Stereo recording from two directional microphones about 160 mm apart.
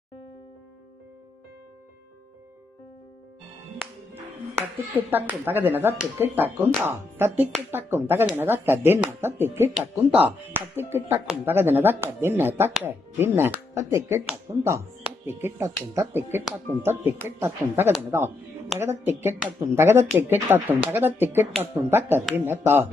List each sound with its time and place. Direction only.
3.8 s speech: 10° right (ahead or behind)